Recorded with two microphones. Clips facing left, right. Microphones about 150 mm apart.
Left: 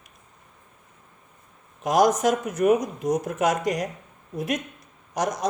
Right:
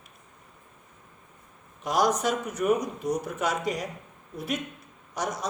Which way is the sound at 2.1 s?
90° left.